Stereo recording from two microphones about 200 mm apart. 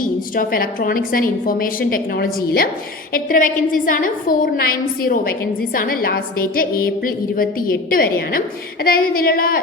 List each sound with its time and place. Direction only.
0.0 s a woman's voice: 45° left (ahead or behind)